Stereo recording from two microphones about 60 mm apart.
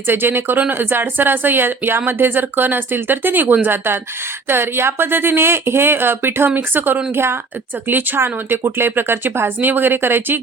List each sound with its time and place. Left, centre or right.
0.1 s speech: right